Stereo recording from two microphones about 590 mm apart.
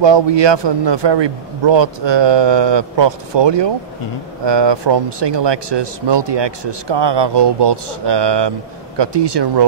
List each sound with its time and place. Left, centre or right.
0.0 s speech: right